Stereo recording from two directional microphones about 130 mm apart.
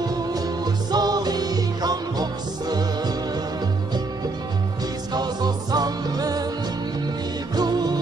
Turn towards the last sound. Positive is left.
turn(degrees=-30)  # may be behind; listen again after turning